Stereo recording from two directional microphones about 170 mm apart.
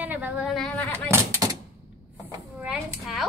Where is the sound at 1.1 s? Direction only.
20° right (ahead or behind).